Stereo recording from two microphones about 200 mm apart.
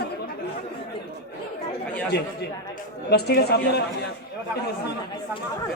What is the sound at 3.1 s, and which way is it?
Speech, 55° left (ahead or behind).